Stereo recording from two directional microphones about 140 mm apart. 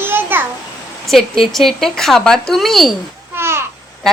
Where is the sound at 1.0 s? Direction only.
Centre (ahead or behind).